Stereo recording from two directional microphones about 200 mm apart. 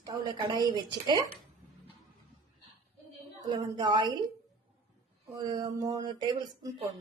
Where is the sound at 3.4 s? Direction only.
20° right (ahead or behind).